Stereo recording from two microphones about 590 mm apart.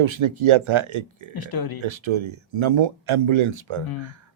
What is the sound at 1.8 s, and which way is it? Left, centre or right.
Speech, right.